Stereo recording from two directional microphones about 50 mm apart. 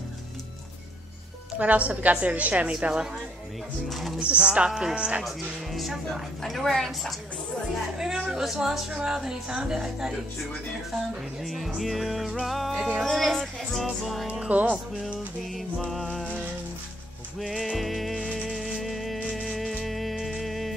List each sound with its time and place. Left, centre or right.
1.6 s a woman's voice: right
2.7 s a woman's voice: centre
4.2 s a woman's voice: right
5.2 s music: centre
8.0 s a woman's voice: centre
11.4 s music: centre
14.5 s speech: right
15.1 s music: centre
17.4 s music: centre
18.5 s music: centre
18.8 s music: centre